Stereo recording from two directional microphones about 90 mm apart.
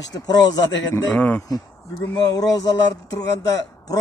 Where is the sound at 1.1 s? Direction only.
15° left (ahead or behind).